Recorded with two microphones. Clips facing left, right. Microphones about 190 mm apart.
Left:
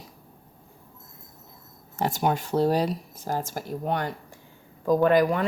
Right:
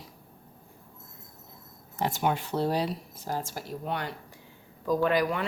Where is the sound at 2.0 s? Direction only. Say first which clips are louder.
Left 3 dB; 45° left (ahead or behind).